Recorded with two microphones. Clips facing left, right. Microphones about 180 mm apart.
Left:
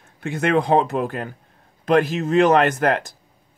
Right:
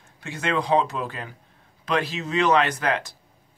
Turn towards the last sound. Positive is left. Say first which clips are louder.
# left 6 dB
turn(degrees=50)  # may be behind; listen again after turning